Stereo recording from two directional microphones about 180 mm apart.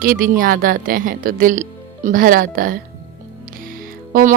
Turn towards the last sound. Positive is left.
turn(degrees=-50)  # may be behind; listen again after turning